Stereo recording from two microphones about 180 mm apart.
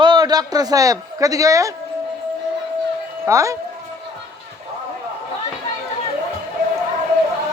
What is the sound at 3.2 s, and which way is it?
Speech, 15° right (ahead or behind).